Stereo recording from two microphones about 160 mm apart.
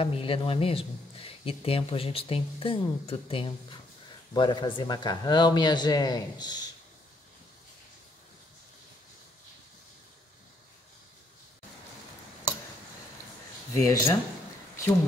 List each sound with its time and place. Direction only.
0.0 s speech: 35° left (ahead or behind)
13.7 s speech: 20° left (ahead or behind)